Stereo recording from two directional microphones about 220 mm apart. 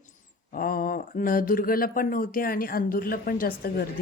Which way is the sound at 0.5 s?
40° left (ahead or behind).